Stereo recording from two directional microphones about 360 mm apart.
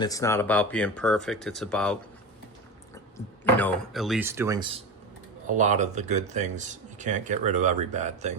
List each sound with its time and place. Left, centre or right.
0.0 s speech: centre
3.6 s speech: centre